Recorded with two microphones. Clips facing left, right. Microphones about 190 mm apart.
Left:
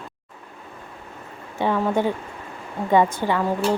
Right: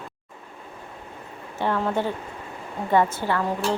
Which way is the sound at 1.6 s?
10° left (ahead or behind).